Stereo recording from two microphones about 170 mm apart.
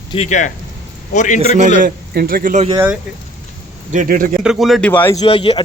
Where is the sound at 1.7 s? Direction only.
60° right (ahead or behind).